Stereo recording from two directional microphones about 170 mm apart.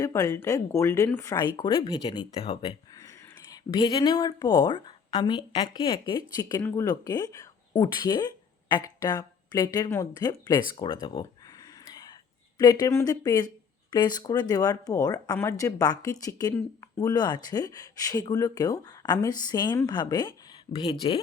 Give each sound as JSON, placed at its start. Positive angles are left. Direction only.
{"t": 0.0, "sound": "speech", "side_deg": 20}
{"t": 3.0, "sound": "speech", "side_deg": 20}
{"t": 12.5, "sound": "speech", "side_deg": 20}